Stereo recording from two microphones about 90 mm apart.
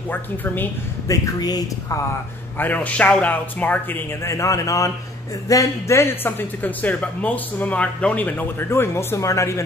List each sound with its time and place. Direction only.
0.1 s speech: 20° left (ahead or behind)
1.0 s speech: 35° left (ahead or behind)
2.5 s a man's voice: 20° left (ahead or behind)
4.1 s speech: 30° left (ahead or behind)